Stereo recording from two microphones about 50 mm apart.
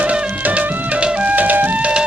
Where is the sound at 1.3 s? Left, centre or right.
Right.